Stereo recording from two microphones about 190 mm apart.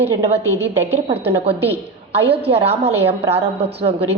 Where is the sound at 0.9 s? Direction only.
35° right (ahead or behind).